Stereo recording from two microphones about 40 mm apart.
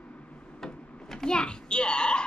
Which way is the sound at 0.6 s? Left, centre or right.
Centre.